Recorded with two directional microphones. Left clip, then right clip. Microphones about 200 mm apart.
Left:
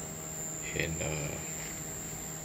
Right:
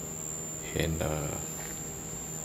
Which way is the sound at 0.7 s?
30° right (ahead or behind).